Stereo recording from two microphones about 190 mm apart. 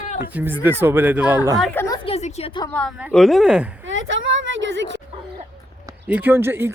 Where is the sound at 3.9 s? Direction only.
80° right.